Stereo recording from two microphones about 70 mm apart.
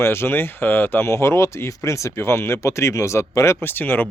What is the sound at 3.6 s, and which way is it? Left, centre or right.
Speech, left.